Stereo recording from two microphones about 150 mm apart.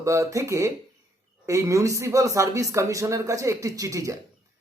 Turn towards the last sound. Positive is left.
turn(degrees=-20)  # may be behind; listen again after turning